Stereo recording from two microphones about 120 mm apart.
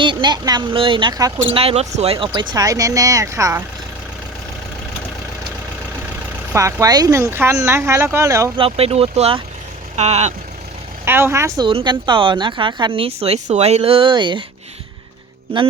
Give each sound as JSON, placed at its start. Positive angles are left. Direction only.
{"t": 0.0, "sound": "speech", "side_deg": -40}
{"t": 1.5, "sound": "speech", "side_deg": -55}
{"t": 2.1, "sound": "speech", "side_deg": -45}
{"t": 6.5, "sound": "speech", "side_deg": -25}
{"t": 8.5, "sound": "speech", "side_deg": -55}
{"t": 9.9, "sound": "vehicle", "side_deg": -65}
{"t": 11.0, "sound": "speech", "side_deg": -20}
{"t": 11.6, "sound": "a woman's voice", "side_deg": -40}